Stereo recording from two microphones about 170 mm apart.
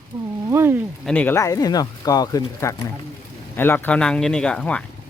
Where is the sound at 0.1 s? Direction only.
25° right (ahead or behind).